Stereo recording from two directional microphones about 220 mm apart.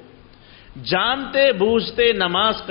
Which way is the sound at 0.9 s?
10° left (ahead or behind).